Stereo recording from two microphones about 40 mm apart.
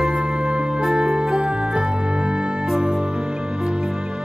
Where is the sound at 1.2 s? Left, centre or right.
Centre.